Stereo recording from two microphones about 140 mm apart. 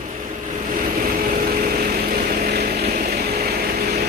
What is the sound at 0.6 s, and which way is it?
Vehicle, 90° right.